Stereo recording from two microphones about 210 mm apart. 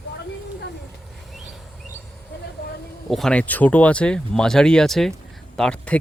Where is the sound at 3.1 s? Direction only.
5° left (ahead or behind).